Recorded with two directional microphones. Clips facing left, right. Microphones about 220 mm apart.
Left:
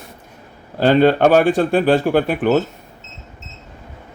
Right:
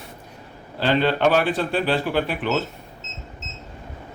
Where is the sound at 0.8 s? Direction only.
45° left (ahead or behind).